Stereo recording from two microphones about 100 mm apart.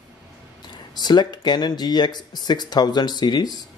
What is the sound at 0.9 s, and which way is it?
Speech, 45° left (ahead or behind).